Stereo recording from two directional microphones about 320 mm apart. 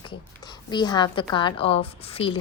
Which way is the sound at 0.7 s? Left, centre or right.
Centre.